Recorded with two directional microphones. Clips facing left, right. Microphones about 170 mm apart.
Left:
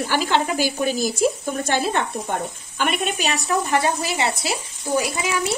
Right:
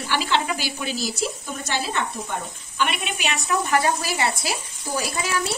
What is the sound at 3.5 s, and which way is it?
Speech, 25° left (ahead or behind).